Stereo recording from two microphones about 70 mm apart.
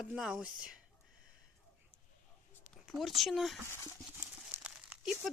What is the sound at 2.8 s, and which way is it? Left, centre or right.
Speech, centre.